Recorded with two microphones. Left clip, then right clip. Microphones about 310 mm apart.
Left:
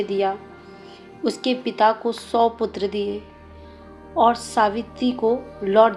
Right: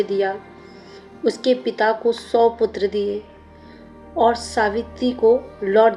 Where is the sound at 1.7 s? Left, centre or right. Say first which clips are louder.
Even; left.